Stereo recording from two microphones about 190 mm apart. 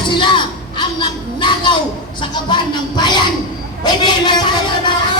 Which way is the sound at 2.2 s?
25° left (ahead or behind).